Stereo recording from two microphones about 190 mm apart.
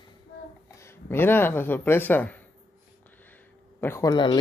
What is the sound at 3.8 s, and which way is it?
Speech, 15° left (ahead or behind).